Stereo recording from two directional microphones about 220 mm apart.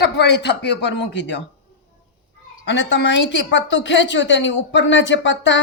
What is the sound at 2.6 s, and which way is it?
A woman's voice, 50° left (ahead or behind).